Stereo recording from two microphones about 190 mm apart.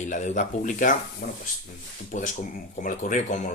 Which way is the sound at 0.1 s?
40° left (ahead or behind).